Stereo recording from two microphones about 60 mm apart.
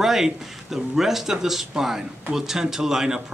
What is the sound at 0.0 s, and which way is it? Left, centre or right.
Speech, centre.